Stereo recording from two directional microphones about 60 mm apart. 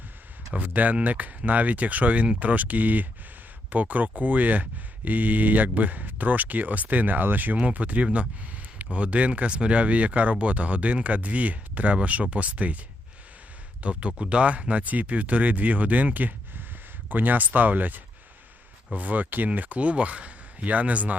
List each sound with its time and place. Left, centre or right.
0.5 s speech: right
13.8 s speech: right